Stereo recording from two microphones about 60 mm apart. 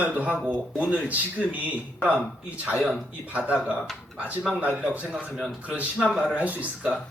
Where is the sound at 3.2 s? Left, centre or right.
Right.